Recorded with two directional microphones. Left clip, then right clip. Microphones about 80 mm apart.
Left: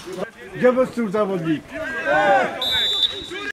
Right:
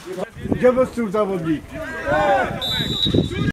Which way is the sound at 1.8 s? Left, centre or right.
Centre.